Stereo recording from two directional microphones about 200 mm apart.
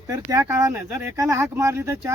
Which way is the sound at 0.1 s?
15° right (ahead or behind).